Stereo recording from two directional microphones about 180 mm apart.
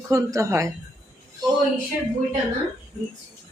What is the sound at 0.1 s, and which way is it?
Speech, 15° right (ahead or behind).